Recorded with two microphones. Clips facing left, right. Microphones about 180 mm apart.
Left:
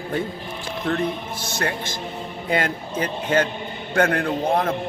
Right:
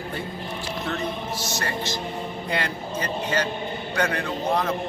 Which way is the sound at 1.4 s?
55° left (ahead or behind).